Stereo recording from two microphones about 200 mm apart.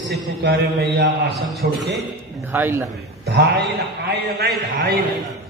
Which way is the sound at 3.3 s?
60° right (ahead or behind).